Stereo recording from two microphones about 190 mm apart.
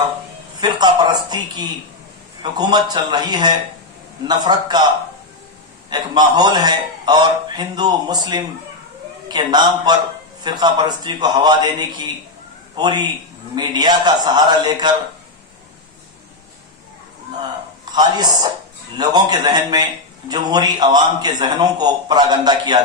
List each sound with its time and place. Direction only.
0.6 s a man's voice: 20° right (ahead or behind)
5.9 s a man's voice: 20° right (ahead or behind)
17.9 s a man's voice: 20° right (ahead or behind)